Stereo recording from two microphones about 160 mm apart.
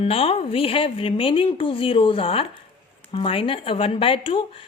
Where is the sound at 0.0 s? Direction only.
35° left (ahead or behind).